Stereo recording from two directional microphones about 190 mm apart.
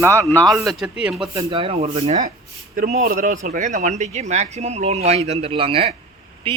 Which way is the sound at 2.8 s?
50° right (ahead or behind).